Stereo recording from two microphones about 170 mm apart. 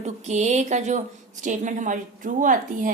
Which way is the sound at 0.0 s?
45° right (ahead or behind).